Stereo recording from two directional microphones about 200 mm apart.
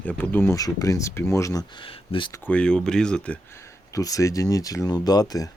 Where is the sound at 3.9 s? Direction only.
15° left (ahead or behind).